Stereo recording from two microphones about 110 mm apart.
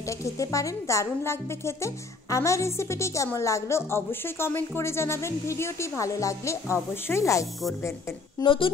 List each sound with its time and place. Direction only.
0.2 s a woman's voice: 30° left (ahead or behind)
8.4 s speech: 35° left (ahead or behind)